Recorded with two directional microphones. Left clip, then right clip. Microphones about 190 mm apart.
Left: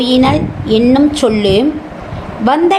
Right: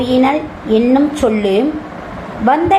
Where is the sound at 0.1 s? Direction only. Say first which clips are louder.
Even; 45° left (ahead or behind).